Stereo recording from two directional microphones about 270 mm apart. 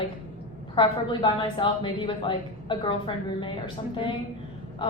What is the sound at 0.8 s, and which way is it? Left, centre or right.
A woman's voice, centre.